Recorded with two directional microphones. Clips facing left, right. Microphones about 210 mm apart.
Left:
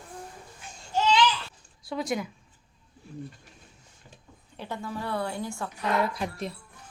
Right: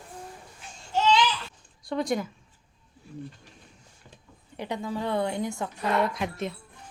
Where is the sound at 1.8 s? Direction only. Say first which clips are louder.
Right 3 dB; centre (ahead or behind).